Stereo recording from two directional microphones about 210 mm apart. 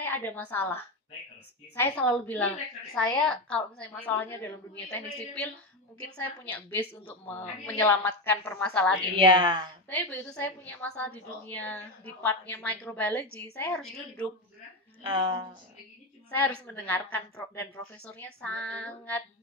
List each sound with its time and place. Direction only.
0.0 s a woman's voice: 10° left (ahead or behind)
1.8 s a woman's voice: 5° left (ahead or behind)
9.4 s a woman's voice: 20° right (ahead or behind)
9.8 s a woman's voice: 5° left (ahead or behind)
15.0 s a woman's voice: 25° right (ahead or behind)
16.3 s a woman's voice: 5° left (ahead or behind)